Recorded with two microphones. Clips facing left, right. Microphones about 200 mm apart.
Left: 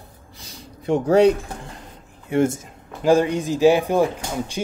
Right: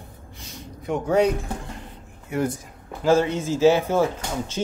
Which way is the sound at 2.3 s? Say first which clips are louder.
Left 6 dB; 25° left (ahead or behind).